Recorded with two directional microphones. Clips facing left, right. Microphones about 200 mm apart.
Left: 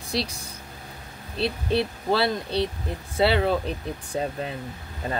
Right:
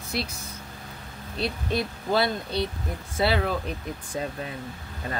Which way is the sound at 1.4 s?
30° left (ahead or behind).